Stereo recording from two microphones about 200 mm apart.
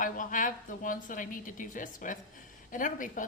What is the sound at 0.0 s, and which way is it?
A woman's voice, 40° left (ahead or behind).